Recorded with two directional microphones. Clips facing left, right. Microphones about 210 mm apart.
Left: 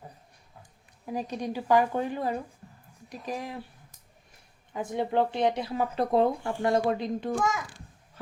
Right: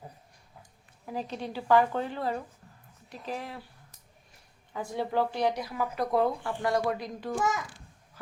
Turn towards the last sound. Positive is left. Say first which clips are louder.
# left 4 dB
turn(degrees=25)  # may be behind; listen again after turning